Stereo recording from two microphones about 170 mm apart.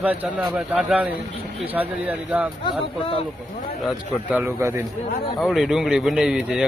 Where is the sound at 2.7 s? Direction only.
30° left (ahead or behind).